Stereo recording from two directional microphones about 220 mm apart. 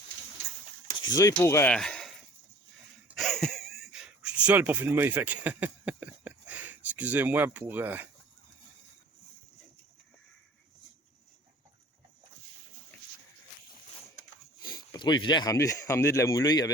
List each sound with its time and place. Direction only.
0.9 s speech: 15° left (ahead or behind); by 8.0 s 10° right (ahead or behind)
14.9 s speech: 20° left (ahead or behind)